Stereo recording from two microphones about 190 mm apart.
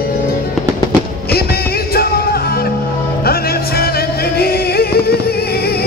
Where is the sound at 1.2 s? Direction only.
55° left (ahead or behind).